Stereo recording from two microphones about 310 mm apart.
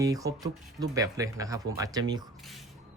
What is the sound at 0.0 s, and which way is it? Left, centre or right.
Speech, centre.